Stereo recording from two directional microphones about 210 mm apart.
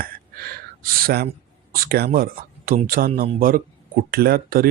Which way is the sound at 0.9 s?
45° right (ahead or behind).